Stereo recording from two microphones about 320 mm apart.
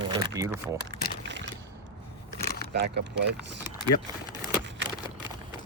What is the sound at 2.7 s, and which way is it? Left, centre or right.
Speech, right.